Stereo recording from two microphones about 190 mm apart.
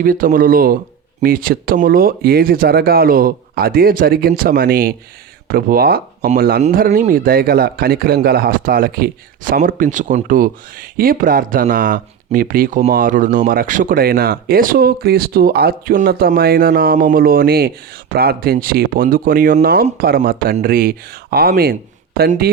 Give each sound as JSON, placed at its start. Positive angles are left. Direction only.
{"t": 0.0, "sound": "speech", "side_deg": -45}